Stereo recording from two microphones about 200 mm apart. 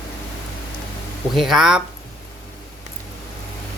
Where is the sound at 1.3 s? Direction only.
Centre (ahead or behind).